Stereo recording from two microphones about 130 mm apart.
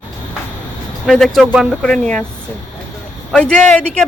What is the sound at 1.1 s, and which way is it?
Speech, centre (ahead or behind).